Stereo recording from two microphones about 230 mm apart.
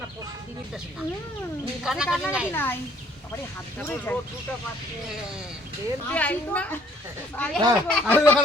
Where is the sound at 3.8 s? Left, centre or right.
Centre.